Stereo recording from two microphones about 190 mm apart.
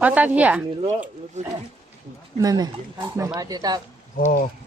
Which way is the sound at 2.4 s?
20° right (ahead or behind).